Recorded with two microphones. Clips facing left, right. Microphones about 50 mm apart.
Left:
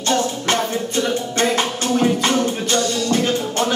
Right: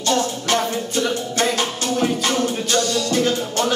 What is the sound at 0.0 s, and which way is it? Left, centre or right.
Music, left.